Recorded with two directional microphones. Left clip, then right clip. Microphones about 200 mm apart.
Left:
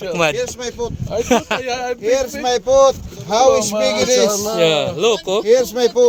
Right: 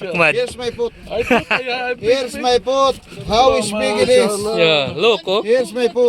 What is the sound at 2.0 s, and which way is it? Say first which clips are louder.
Speech: even; 50° right (ahead or behind).